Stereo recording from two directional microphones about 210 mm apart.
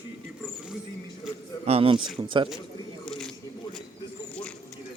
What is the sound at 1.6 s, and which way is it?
Speech, 30° right (ahead or behind).